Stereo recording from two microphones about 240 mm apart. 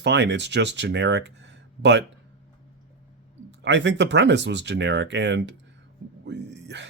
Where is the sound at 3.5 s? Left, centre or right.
Right.